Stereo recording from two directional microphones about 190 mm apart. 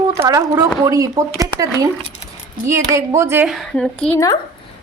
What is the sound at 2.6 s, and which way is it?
Speech, 15° right (ahead or behind).